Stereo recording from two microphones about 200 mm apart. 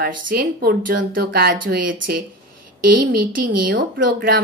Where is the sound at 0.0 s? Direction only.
50° right (ahead or behind).